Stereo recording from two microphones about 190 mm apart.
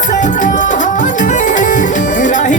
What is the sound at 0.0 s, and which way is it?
Music, 40° left (ahead or behind).